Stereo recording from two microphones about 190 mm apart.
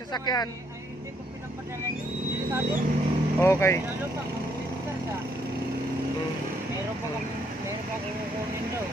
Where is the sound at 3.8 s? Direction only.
10° right (ahead or behind).